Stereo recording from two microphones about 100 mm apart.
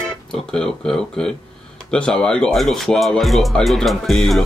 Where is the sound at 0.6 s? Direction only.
5° left (ahead or behind).